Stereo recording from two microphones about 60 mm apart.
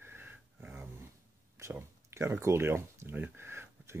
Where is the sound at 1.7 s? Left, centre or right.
Right.